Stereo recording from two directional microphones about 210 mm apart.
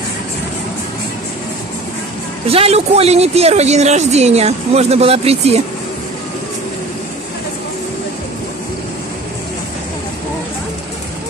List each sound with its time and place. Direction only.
2.5 s speech: 30° right (ahead or behind)